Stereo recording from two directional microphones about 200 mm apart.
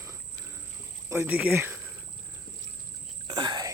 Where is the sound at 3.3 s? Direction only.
20° right (ahead or behind).